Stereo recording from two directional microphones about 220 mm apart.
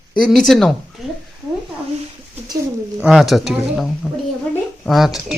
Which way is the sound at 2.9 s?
5° right (ahead or behind).